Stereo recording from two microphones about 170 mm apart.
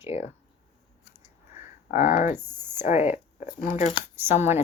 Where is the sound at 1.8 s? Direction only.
45° left (ahead or behind).